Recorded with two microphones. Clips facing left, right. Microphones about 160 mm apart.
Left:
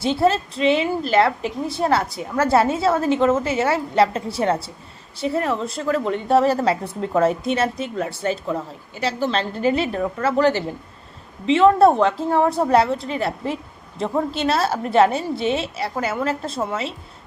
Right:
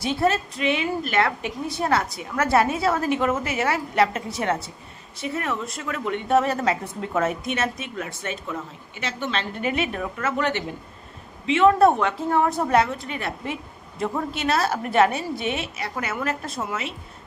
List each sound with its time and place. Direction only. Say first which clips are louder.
0.0 s a woman's voice: left 4 dB; 30° left (ahead or behind)